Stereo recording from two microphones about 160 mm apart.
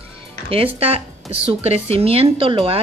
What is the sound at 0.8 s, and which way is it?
Speech, 40° right (ahead or behind).